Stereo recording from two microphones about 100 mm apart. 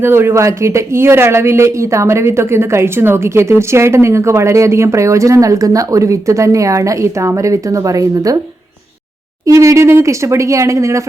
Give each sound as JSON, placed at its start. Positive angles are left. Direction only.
{"t": 0.0, "sound": "speech", "side_deg": -25}
{"t": 9.5, "sound": "speech", "side_deg": -30}